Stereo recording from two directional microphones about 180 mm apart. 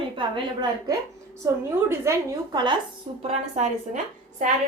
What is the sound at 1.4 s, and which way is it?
Speech, 15° right (ahead or behind).